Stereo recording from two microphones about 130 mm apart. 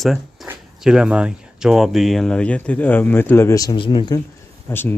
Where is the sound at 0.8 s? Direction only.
5° right (ahead or behind); by 3.8 s 25° left (ahead or behind).